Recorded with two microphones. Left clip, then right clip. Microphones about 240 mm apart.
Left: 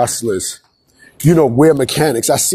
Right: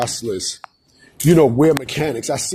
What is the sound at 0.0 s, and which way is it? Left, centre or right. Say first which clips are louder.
Speech: left 6 dB; left.